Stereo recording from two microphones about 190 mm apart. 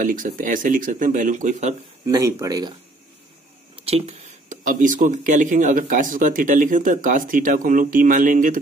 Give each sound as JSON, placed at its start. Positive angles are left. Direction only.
{"t": 0.0, "sound": "speech", "side_deg": -45}
{"t": 2.0, "sound": "speech", "side_deg": -20}
{"t": 3.7, "sound": "speech", "side_deg": -30}